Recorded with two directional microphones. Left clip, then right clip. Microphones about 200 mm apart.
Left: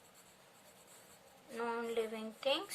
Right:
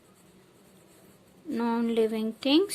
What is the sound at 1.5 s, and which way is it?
Speech, 35° right (ahead or behind).